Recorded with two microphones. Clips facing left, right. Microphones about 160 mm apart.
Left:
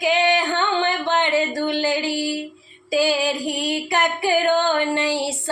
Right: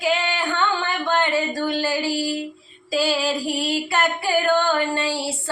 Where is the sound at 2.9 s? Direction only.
15° left (ahead or behind).